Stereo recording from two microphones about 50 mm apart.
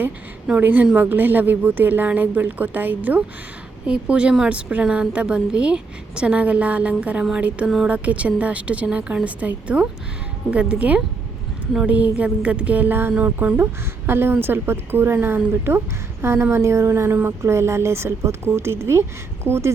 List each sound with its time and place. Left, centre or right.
0.5 s speech: right
3.8 s a woman's voice: right
13.1 s speech: right
14.1 s a woman's voice: right